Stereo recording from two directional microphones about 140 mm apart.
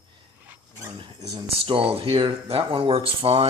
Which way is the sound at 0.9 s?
30° right (ahead or behind).